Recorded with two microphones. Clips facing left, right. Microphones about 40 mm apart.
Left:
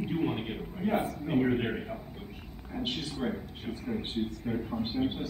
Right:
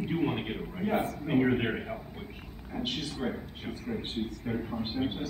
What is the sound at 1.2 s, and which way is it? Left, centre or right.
Speech, centre.